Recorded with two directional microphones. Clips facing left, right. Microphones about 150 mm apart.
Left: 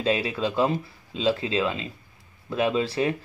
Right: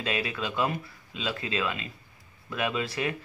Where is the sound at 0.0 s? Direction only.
30° left (ahead or behind).